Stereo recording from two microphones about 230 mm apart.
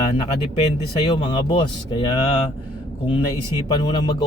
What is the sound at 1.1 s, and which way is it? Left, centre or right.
Speech, centre.